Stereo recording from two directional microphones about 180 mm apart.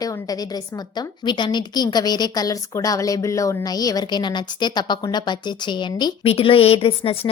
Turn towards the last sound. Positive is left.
turn(degrees=30)  # may be behind; listen again after turning